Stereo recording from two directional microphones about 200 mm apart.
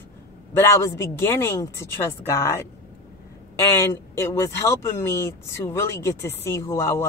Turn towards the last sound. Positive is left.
turn(degrees=15)  # may be behind; listen again after turning